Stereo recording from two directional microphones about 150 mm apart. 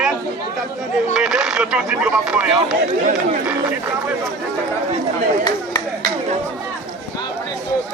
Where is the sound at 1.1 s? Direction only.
5° right (ahead or behind).